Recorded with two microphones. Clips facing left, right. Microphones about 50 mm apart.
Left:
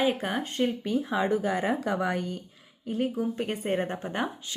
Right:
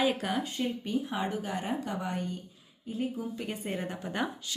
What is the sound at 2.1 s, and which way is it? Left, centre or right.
Speech, left.